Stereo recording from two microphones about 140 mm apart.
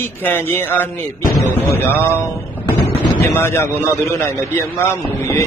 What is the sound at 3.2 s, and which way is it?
Speech, 15° left (ahead or behind).